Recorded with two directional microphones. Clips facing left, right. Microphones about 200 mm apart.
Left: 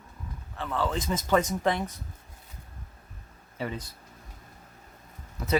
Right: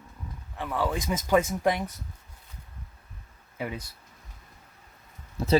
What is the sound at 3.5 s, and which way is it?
Speech, 10° right (ahead or behind).